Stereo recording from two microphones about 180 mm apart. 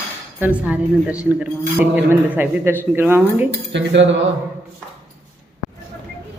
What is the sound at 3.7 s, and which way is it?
Cutlery, 80° right.